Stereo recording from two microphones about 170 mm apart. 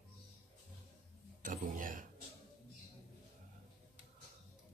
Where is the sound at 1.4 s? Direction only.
55° right (ahead or behind).